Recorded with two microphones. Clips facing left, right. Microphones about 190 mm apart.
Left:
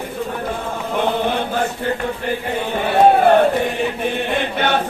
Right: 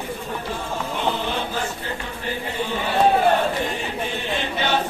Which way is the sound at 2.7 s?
55° left (ahead or behind).